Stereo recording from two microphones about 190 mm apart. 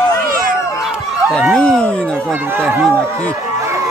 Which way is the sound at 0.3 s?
45° right (ahead or behind).